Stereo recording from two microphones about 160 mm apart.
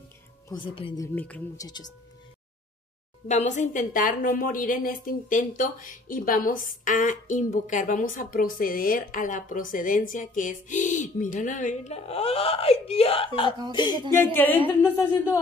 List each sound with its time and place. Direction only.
0.5 s speech: 20° left (ahead or behind)
3.3 s a woman's voice: 45° left (ahead or behind); by 14.0 s 25° left (ahead or behind)
14.2 s speech: 10° left (ahead or behind)